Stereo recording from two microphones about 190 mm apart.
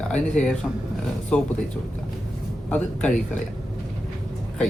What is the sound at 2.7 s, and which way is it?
Speech, 5° left (ahead or behind).